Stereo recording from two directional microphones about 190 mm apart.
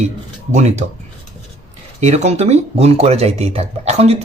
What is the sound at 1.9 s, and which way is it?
Speech, 35° right (ahead or behind).